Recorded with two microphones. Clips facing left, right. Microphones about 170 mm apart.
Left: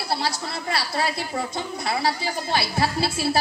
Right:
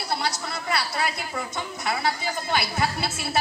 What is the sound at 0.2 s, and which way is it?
A woman's voice, 30° left (ahead or behind).